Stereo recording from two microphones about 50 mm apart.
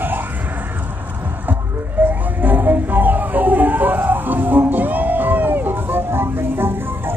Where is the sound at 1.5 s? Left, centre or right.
Right.